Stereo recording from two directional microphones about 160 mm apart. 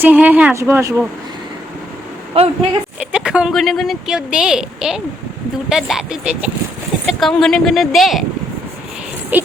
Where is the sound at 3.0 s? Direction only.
5° right (ahead or behind).